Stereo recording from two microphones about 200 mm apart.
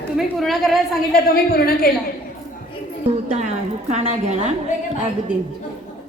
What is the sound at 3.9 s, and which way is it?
Speech, 35° right (ahead or behind).